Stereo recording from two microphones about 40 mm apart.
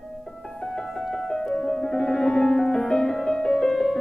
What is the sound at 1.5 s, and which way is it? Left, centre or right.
Music, centre.